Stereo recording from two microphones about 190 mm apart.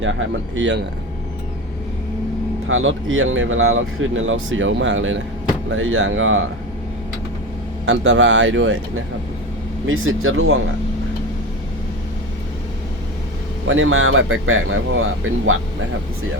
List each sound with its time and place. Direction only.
0.0 s speech: 90° right
2.6 s speech: 90° right
7.9 s speech: 85° right
9.8 s speech: 90° right
13.7 s speech: 90° right